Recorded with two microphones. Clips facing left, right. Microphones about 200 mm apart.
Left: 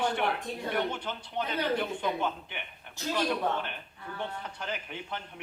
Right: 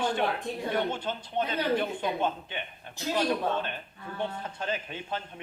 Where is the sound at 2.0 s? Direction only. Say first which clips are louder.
Right 2 dB; 25° right (ahead or behind).